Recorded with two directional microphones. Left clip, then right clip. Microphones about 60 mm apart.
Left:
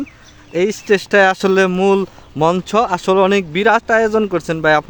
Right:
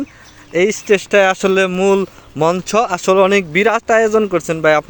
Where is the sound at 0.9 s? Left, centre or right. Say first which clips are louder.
Left 1 dB; left.